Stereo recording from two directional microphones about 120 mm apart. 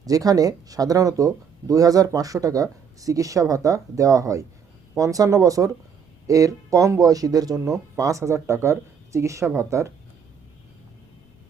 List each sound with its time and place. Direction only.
0.0 s speech: 30° right (ahead or behind)